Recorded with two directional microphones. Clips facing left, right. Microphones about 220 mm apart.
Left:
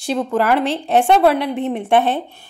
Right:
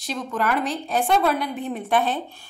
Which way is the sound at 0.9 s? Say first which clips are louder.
Left 8 dB; 70° left (ahead or behind).